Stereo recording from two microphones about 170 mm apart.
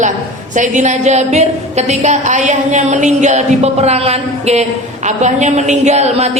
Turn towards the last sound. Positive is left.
turn(degrees=-40)  # may be behind; listen again after turning